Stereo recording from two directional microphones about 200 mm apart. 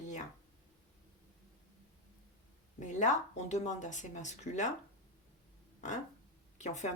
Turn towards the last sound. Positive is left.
turn(degrees=35)  # may be behind; listen again after turning